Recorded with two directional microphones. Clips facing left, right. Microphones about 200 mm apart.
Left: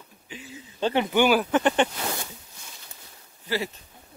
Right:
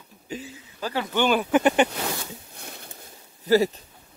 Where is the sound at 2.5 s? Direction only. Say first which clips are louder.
Right 7 dB; 60° right (ahead or behind).